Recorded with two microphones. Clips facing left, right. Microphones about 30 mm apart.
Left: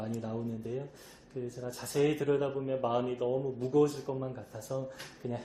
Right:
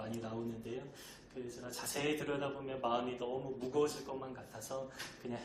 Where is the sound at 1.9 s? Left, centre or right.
Centre.